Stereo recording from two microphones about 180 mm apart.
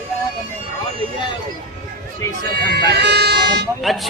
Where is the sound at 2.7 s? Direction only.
70° right (ahead or behind).